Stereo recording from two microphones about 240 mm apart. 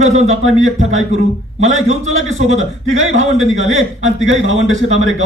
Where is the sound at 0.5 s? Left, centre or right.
Right.